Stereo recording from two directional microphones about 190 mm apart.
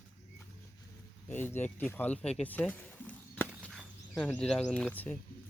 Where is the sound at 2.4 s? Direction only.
10° left (ahead or behind).